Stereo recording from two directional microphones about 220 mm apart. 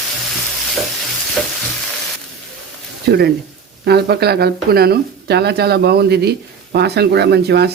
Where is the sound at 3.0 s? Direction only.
45° right (ahead or behind).